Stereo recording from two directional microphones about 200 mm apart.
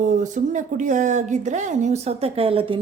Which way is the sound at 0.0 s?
40° right (ahead or behind).